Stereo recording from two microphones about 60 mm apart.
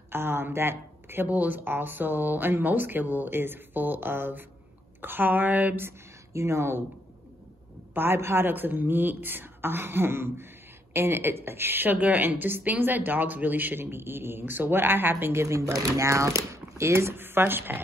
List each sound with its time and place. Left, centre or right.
0.1 s a woman's voice: right
5.8 s a woman's voice: right
7.9 s a woman's voice: right
15.4 s speech: right